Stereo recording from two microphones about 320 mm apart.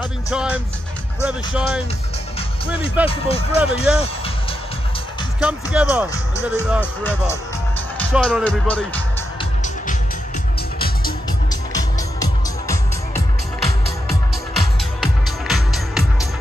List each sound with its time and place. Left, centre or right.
0.3 s speech: centre
3.1 s speech: centre
3.7 s speech: centre
5.4 s speech: centre
6.1 s speech: centre
9.4 s music: left
11.7 s music: centre